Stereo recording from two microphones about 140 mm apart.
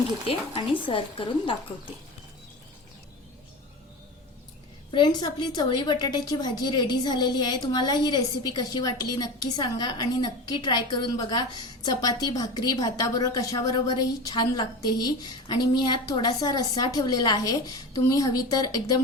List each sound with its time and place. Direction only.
0.9 s a woman's voice: 40° left (ahead or behind)
4.9 s a woman's voice: 35° left (ahead or behind)